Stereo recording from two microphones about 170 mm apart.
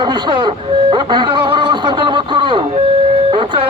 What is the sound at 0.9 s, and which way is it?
Snicker, 25° right (ahead or behind).